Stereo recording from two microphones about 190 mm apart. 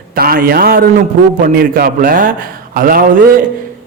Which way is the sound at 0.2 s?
50° right (ahead or behind).